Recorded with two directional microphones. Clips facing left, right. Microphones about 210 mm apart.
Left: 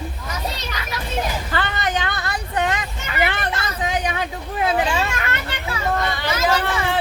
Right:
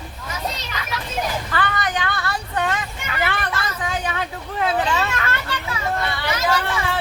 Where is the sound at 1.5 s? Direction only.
25° left (ahead or behind).